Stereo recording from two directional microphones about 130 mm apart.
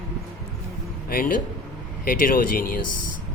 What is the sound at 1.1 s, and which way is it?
Speech, 90° left.